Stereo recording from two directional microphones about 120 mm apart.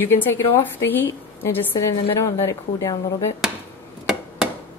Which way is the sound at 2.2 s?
25° left (ahead or behind).